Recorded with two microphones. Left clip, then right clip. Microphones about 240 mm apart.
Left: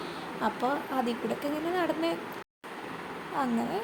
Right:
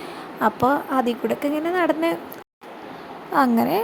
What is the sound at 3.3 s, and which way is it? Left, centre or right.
Speech, right.